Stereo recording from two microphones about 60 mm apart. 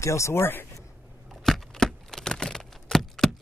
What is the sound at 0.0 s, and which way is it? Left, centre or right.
Speech, left.